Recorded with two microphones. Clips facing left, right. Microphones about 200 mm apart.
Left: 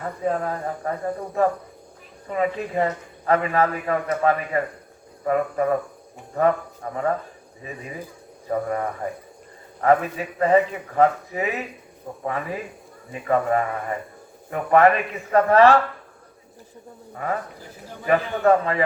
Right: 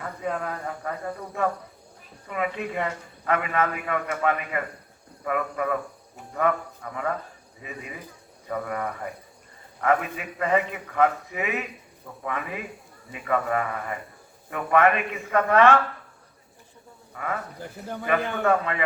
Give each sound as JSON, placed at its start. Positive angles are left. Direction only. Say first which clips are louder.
{"t": 0.0, "sound": "a man's voice", "louder": "left 5 dB", "side_deg": 35}
{"t": 17.2, "sound": "a man's voice", "louder": "left 4 dB", "side_deg": 35}
{"t": 18.4, "sound": "a man's voice", "louder": "left 7 dB", "side_deg": 35}